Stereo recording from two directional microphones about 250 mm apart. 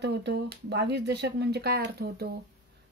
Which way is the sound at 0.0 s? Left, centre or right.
Right.